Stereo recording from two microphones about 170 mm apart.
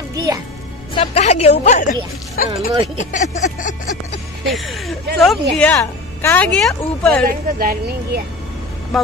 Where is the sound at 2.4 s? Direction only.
50° left (ahead or behind).